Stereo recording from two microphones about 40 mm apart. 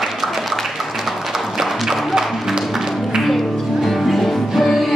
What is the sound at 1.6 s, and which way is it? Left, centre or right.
Music, centre.